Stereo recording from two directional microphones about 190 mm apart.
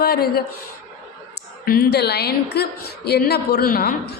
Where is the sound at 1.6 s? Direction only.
55° left (ahead or behind).